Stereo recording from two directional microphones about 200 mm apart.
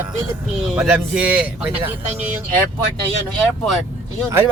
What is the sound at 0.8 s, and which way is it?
Speech, 5° right (ahead or behind).